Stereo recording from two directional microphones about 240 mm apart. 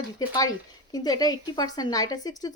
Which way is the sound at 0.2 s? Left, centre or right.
Centre.